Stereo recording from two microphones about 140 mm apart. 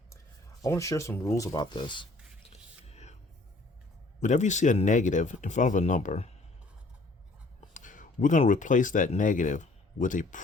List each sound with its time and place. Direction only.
0.6 s speech: 20° left (ahead or behind)
2.1 s a sound: 5° right (ahead or behind)
2.4 s whispering: 50° left (ahead or behind)
4.2 s speech: 60° left (ahead or behind)
7.7 s speech: 65° left (ahead or behind)